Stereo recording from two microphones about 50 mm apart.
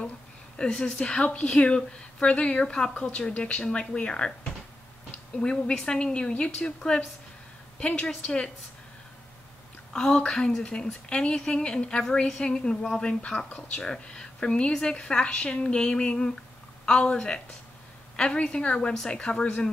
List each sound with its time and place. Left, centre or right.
0.6 s speech: centre
5.4 s speech: centre
9.9 s speech: centre